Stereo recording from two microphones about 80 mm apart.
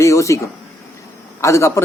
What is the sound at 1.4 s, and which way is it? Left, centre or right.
Speech, left.